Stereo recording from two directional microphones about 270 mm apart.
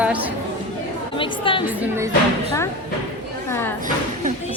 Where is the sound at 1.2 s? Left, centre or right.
Centre.